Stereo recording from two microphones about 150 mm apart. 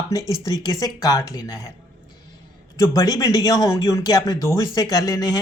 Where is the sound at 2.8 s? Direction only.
25° left (ahead or behind).